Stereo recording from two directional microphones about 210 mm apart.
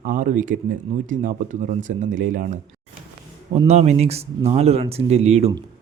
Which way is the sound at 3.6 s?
30° right (ahead or behind).